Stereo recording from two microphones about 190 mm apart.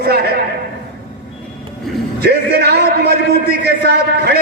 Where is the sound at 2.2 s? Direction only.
60° right (ahead or behind).